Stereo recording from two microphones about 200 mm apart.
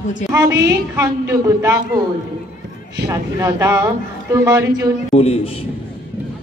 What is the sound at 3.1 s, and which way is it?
Speech, 15° right (ahead or behind).